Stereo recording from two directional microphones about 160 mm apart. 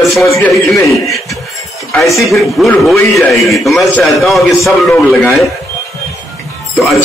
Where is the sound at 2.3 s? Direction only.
Centre (ahead or behind).